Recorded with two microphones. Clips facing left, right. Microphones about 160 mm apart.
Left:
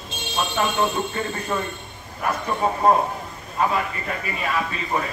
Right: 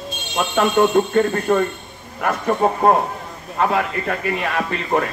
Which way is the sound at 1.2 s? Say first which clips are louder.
Right 10 dB; 60° right (ahead or behind).